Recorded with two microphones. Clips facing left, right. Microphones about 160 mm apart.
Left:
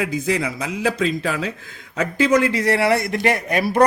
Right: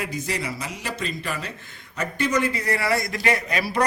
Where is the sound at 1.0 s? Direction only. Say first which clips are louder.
Left 8 dB; 90° left.